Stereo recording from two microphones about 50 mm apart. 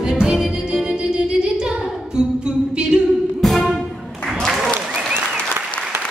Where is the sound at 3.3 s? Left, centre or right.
Centre.